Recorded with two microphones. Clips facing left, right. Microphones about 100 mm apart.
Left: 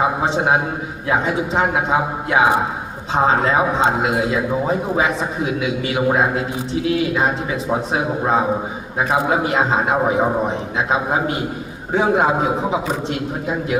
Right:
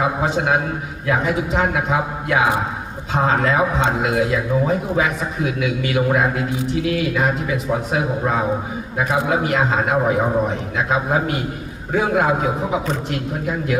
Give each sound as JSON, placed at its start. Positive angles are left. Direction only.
{"t": 0.0, "sound": "a man's voice", "side_deg": 25}